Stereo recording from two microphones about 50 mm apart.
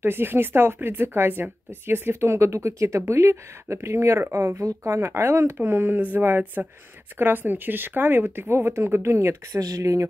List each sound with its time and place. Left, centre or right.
0.0 s speech: right
3.7 s speech: right
5.7 s speech: right